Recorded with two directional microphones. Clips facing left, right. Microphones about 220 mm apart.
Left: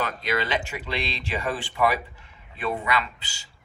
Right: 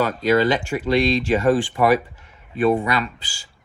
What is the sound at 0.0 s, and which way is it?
Speech, 40° right (ahead or behind).